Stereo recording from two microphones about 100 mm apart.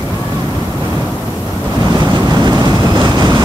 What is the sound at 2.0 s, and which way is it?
Vehicle, 45° right (ahead or behind).